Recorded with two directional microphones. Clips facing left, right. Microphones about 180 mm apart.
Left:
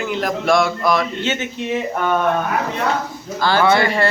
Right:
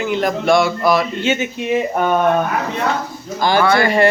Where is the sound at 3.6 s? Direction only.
25° left (ahead or behind).